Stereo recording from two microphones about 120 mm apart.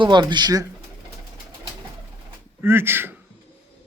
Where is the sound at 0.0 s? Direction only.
40° right (ahead or behind).